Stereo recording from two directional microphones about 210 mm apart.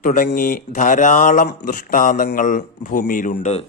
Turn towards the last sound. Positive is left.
turn(degrees=30)  # may be behind; listen again after turning